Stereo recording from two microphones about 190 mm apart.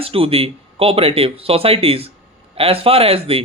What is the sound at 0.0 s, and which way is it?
Speech, 30° right (ahead or behind).